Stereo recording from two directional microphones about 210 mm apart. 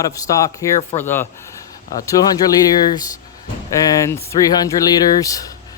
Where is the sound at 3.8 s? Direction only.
15° left (ahead or behind).